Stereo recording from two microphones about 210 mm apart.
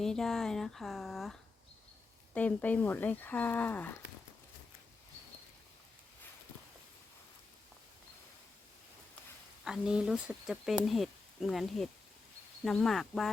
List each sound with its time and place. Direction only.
0.0 s speech: centre (ahead or behind)
9.6 s speech: 5° right (ahead or behind)